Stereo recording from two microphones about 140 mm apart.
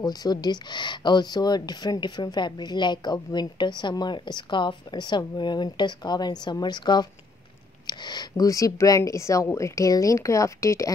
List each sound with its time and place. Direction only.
0.0 s a woman's voice: 30° left (ahead or behind)